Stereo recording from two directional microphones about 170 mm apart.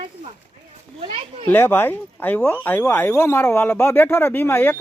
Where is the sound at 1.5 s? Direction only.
10° left (ahead or behind).